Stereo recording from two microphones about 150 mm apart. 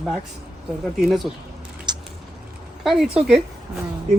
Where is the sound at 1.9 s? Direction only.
30° right (ahead or behind).